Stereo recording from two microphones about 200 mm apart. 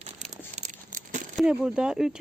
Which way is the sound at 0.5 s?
40° right (ahead or behind).